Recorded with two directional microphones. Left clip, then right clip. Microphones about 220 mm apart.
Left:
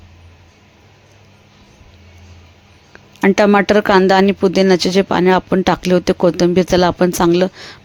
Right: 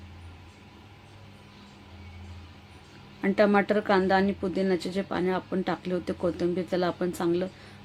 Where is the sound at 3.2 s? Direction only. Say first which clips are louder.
Left 11 dB; 45° left (ahead or behind).